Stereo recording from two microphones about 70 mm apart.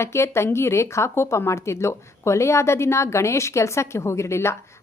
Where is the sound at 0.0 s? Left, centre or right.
Left.